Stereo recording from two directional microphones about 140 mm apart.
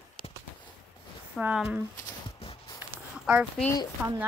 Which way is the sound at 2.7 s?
10° right (ahead or behind).